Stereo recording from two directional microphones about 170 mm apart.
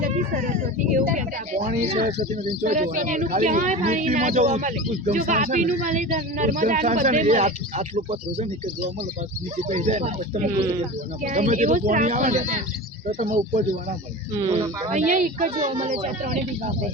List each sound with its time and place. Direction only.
0.1 s a sound: 55° right (ahead or behind)
2.0 s speech: 40° right (ahead or behind)
3.8 s speech: 35° right (ahead or behind)
4.1 s speech: 45° right (ahead or behind)
5.2 s speech: 55° right (ahead or behind)
9.6 s speech: 40° right (ahead or behind)
10.6 s speech: 30° right (ahead or behind)
11.2 s speech: 45° right (ahead or behind)
14.8 s speech: 45° right (ahead or behind)